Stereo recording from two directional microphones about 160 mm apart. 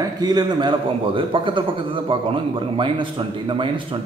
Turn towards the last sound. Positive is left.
turn(degrees=-30)  # may be behind; listen again after turning